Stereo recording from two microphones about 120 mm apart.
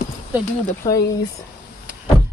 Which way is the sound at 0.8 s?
30° left (ahead or behind).